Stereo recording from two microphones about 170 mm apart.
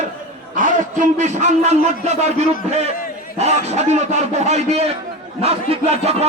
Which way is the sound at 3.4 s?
40° right (ahead or behind).